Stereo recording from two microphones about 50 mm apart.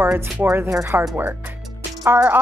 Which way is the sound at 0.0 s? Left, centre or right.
Right.